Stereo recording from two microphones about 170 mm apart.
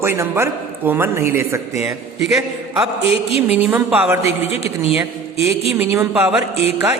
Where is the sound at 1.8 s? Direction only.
Centre (ahead or behind).